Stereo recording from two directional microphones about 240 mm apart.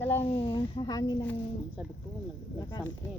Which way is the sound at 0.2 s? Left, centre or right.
Left.